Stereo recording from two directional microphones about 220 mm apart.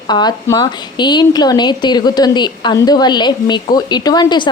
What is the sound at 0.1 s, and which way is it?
A woman's voice, 20° left (ahead or behind).